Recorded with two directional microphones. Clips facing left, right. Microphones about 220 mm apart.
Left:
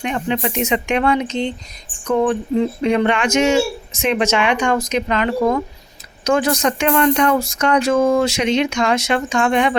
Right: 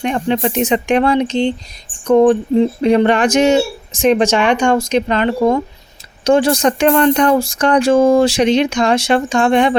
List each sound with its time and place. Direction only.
0.0 s speech: 35° right (ahead or behind)